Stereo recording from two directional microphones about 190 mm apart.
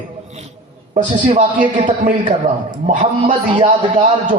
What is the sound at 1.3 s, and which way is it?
Speech, 40° right (ahead or behind).